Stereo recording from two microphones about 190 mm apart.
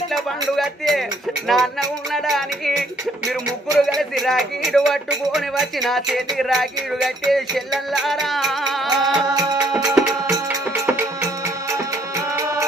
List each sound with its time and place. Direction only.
0.1 s speech: centre (ahead or behind)
9.3 s music: 20° right (ahead or behind)